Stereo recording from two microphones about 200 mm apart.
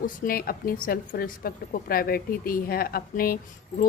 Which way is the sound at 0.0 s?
45° left (ahead or behind).